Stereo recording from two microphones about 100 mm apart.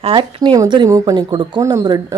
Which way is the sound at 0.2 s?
55° right (ahead or behind).